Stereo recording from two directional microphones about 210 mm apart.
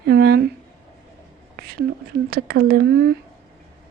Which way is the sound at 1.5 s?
45° right (ahead or behind).